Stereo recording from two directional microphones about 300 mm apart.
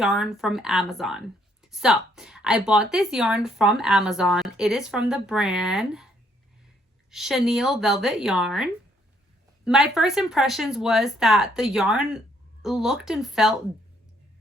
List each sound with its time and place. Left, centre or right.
0.0 s speech: centre
7.1 s speech: centre